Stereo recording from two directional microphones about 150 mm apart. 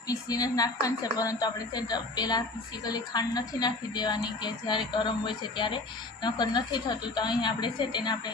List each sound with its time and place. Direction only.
0.1 s a woman's voice: 25° left (ahead or behind)